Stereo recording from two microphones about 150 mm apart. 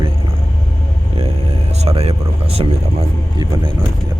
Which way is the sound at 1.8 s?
45° right (ahead or behind).